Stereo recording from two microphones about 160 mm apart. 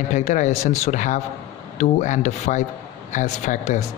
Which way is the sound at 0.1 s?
50° left (ahead or behind).